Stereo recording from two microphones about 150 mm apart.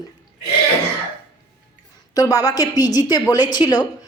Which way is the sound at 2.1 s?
25° left (ahead or behind).